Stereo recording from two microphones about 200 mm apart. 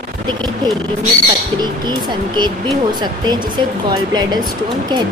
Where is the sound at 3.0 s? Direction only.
20° right (ahead or behind).